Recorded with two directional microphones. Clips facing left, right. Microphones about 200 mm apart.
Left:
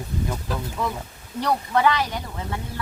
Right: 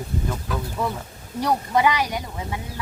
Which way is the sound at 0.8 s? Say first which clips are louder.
Right 1 dB; 10° right (ahead or behind).